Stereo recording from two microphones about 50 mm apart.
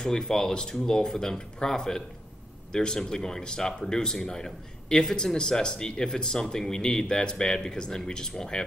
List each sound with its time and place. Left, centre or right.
0.0 s speech: centre